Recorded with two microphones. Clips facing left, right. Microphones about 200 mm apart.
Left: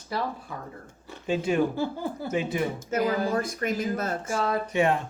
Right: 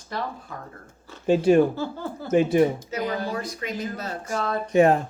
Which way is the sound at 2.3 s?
45° right (ahead or behind).